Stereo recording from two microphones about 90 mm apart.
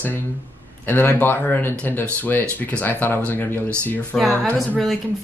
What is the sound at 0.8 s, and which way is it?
Speech, 20° left (ahead or behind).